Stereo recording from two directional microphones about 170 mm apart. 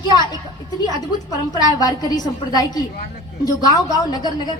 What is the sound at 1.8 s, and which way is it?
A woman's voice, 20° left (ahead or behind).